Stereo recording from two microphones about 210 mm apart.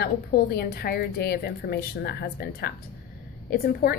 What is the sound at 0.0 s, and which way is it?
A woman's voice, 50° left (ahead or behind).